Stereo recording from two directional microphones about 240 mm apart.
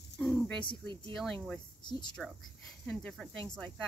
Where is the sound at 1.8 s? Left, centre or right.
Centre.